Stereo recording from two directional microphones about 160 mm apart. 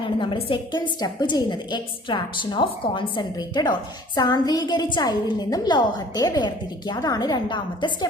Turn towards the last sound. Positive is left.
turn(degrees=30)  # may be behind; listen again after turning